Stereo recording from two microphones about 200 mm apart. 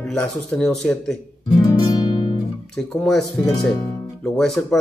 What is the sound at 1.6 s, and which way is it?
Music, 20° left (ahead or behind).